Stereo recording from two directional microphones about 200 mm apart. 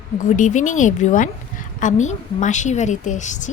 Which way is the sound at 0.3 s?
40° left (ahead or behind).